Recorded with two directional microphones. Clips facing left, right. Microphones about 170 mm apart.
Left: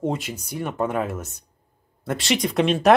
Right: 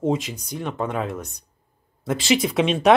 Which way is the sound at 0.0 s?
Centre (ahead or behind).